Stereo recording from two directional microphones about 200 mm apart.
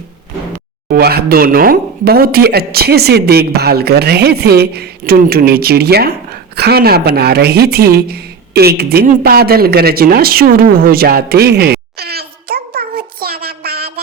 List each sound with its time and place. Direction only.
0.9 s speech: 50° right (ahead or behind)